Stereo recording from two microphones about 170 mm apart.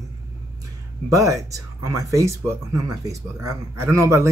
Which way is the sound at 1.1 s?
20° right (ahead or behind).